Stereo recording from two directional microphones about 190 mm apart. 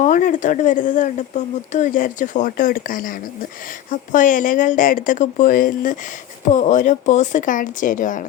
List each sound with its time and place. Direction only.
0.0 s a woman's voice: 45° left (ahead or behind)
4.1 s a woman's voice: 45° left (ahead or behind)